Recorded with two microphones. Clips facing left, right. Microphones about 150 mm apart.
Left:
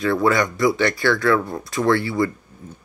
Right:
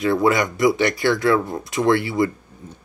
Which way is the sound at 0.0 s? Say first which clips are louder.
Right 1 dB; 20° right (ahead or behind).